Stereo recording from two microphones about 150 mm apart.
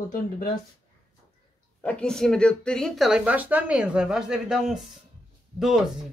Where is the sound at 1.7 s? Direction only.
10° left (ahead or behind).